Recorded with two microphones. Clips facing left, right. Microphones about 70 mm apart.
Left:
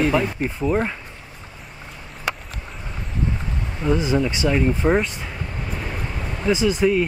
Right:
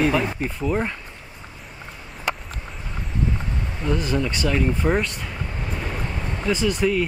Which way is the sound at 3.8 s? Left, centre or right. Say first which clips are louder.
Left 4 dB; centre.